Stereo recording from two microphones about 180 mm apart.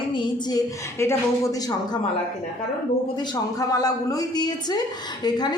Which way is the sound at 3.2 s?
20° left (ahead or behind).